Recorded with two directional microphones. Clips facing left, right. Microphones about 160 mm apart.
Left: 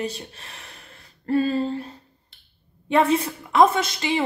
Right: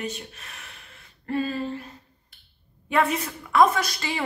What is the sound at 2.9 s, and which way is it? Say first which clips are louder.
A woman's voice: left 4 dB; 30° left (ahead or behind).